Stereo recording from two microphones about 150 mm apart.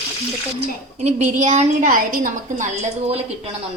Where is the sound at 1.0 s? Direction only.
50° right (ahead or behind).